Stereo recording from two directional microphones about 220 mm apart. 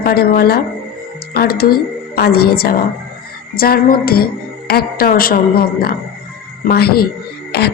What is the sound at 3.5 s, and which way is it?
Music, 45° left (ahead or behind).